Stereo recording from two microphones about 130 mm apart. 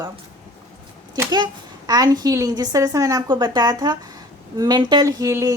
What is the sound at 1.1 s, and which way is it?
A woman's voice, 30° right (ahead or behind).